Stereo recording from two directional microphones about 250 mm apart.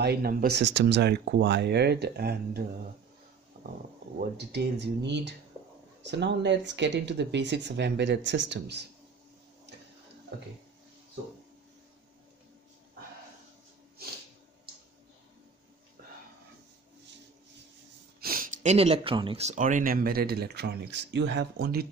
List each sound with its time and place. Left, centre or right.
0.0 s speech: right
4.2 s speech: right
16.0 s a sound: right
18.2 s speech: right